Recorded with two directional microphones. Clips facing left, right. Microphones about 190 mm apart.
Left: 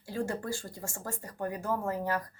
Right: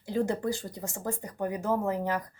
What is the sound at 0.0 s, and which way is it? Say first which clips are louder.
Speech: right 5 dB; 20° right (ahead or behind).